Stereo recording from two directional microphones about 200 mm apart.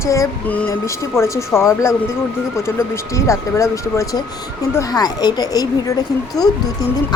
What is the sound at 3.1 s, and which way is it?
Speech, 15° left (ahead or behind).